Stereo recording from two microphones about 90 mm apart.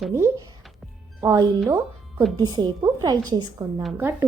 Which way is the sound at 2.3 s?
55° right (ahead or behind).